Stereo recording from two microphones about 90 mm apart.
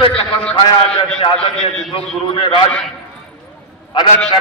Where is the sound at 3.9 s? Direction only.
55° left (ahead or behind).